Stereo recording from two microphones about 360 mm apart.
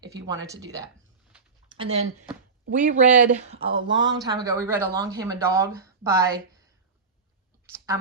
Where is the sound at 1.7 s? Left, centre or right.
Centre.